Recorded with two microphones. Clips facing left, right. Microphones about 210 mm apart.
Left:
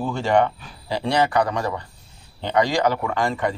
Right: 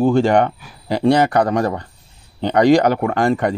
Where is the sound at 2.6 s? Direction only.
60° right (ahead or behind).